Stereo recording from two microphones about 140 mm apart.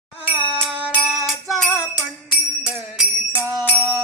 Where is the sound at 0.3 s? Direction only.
10° right (ahead or behind).